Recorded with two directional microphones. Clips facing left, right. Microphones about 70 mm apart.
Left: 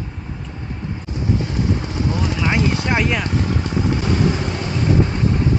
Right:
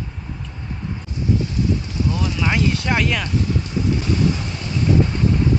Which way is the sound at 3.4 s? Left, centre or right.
Left.